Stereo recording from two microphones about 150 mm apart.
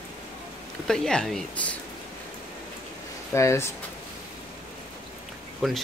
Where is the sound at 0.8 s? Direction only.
5° left (ahead or behind).